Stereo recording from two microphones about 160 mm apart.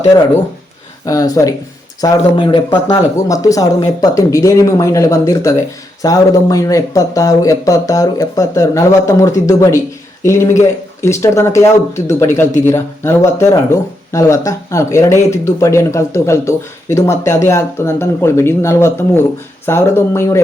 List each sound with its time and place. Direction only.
1.0 s speech: 20° left (ahead or behind)